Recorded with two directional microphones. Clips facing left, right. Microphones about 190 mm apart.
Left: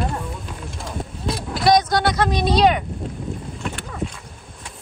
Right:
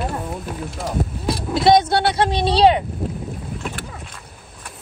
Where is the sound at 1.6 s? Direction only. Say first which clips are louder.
Right 2 dB; 25° right (ahead or behind).